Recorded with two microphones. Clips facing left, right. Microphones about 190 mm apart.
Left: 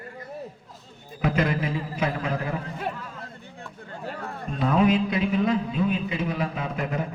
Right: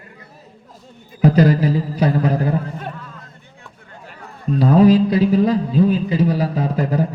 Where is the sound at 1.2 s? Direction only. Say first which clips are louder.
Right 10 dB; 35° right (ahead or behind).